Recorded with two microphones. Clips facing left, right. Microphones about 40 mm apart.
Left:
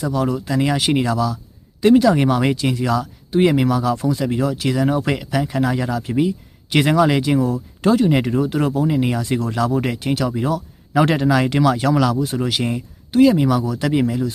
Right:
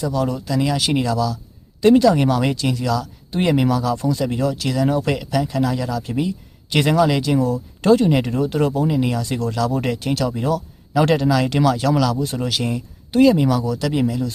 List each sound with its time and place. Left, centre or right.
0.0 s speech: centre
0.4 s speech: left
1.8 s speech: centre
3.3 s speech: centre
7.3 s speech: centre
8.9 s speech: centre
13.1 s speech: centre
13.7 s speech: left